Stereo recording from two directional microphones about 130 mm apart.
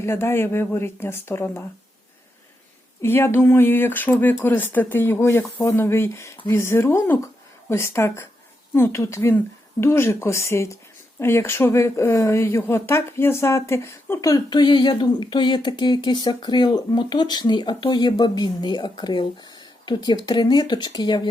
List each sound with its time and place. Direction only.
0.0 s speech: 20° left (ahead or behind)
3.0 s a woman's voice: 20° left (ahead or behind); by 21.2 s 35° left (ahead or behind)